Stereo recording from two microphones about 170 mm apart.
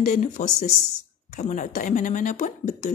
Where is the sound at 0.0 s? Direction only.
45° left (ahead or behind).